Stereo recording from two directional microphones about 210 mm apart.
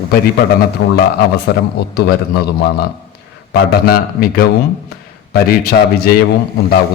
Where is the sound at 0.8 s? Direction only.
60° left (ahead or behind).